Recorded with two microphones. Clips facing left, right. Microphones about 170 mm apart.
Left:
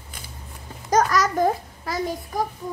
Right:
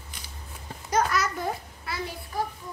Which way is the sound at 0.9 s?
45° left (ahead or behind).